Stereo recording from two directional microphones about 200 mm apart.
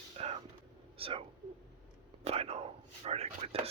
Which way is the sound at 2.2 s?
30° right (ahead or behind).